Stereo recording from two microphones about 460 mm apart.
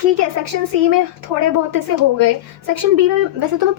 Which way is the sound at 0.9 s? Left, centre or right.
Right.